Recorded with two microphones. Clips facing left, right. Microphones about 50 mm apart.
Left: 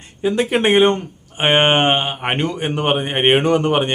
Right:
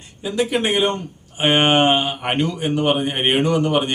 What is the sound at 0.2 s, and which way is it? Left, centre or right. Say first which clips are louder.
Speech: left 3 dB; left.